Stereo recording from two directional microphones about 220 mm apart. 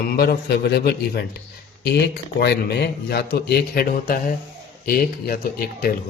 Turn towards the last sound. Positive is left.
turn(degrees=40)  # may be behind; listen again after turning